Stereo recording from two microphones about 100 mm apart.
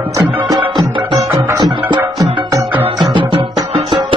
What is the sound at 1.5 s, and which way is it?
Music, 45° right (ahead or behind).